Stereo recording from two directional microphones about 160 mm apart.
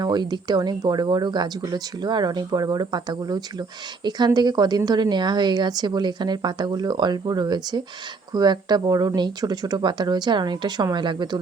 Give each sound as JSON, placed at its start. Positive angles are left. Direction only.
{"t": 0.0, "sound": "a woman's voice", "side_deg": -25}